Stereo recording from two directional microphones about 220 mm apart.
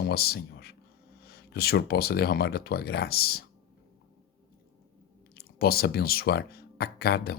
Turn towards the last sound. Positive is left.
turn(degrees=45)  # may be behind; listen again after turning